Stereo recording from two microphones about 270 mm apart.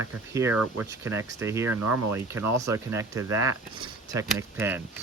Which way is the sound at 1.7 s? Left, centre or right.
Right.